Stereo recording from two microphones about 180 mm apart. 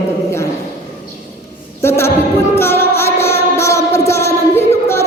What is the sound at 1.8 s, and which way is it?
Speech, 15° left (ahead or behind).